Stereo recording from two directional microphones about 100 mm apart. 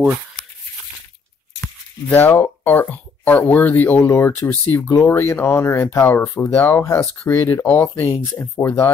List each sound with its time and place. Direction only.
2.0 s speech: 20° left (ahead or behind)